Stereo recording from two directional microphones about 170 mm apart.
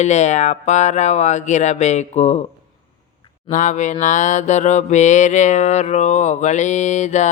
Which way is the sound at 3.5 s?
45° left (ahead or behind).